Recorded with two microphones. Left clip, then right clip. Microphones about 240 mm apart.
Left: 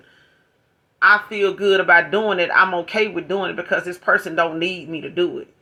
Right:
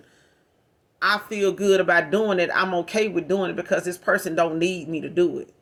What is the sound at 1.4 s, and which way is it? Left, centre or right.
Speech, right.